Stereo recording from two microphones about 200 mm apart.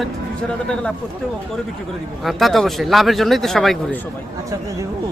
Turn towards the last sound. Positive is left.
turn(degrees=0)  # may be behind; listen again after turning